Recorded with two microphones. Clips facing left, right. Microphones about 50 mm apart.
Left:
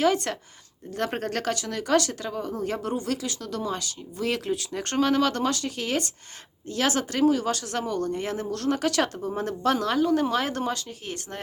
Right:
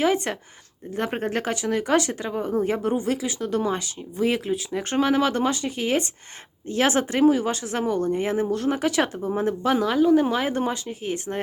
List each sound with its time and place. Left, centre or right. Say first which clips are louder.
0.0 s speech: right 1 dB; centre